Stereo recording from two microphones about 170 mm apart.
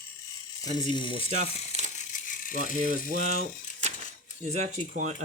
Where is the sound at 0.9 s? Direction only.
30° left (ahead or behind).